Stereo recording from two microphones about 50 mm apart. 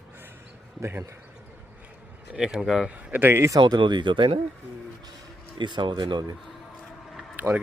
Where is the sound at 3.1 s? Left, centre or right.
Right.